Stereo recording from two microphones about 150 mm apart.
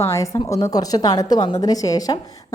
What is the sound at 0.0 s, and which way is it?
A woman's voice, 20° left (ahead or behind).